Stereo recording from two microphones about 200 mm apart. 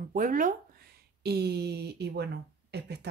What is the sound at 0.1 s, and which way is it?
Speech, 45° right (ahead or behind).